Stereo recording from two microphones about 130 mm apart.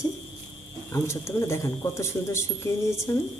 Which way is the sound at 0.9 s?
20° left (ahead or behind).